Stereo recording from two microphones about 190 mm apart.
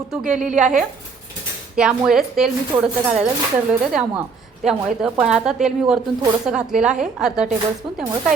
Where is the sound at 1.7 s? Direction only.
5° right (ahead or behind).